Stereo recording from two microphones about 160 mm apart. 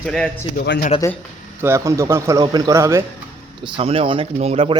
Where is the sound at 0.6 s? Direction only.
80° left.